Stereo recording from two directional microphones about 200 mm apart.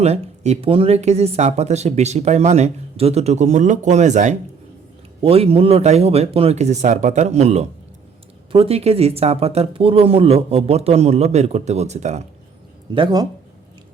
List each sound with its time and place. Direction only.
0.0 s speech: 35° right (ahead or behind)
12.9 s speech: 25° right (ahead or behind)